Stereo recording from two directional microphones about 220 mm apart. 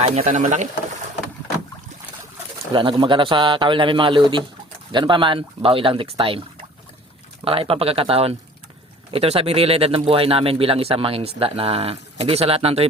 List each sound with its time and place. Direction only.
0.0 s speech: 30° right (ahead or behind)
2.7 s speech: 20° right (ahead or behind)
7.4 s speech: 25° right (ahead or behind)